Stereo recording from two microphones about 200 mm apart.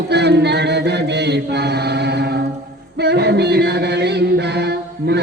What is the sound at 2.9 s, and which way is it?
Chant, 55° right (ahead or behind).